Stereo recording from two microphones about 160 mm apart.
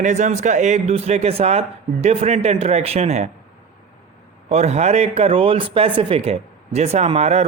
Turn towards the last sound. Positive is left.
turn(degrees=-40)  # may be behind; listen again after turning